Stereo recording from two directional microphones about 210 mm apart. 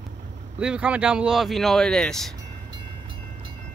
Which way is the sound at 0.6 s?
5° right (ahead or behind).